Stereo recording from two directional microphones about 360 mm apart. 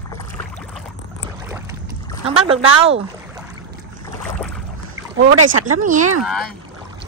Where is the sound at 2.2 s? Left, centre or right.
Centre.